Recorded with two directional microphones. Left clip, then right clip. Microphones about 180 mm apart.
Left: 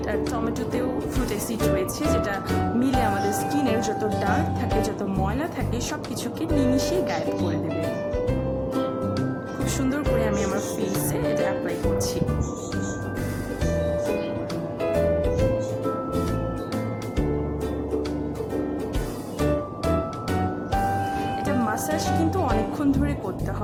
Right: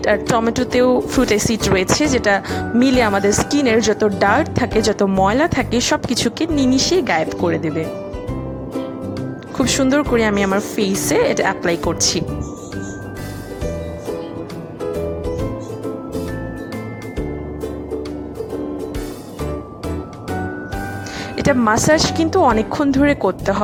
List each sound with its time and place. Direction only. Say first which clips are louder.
0.0 s speech: right 10 dB; 40° right (ahead or behind)
9.6 s speech: right 9 dB; 40° right (ahead or behind)
21.3 s speech: right 10 dB; 40° right (ahead or behind)